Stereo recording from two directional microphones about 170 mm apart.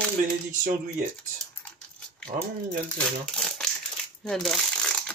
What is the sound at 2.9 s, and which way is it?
Speech, 5° left (ahead or behind).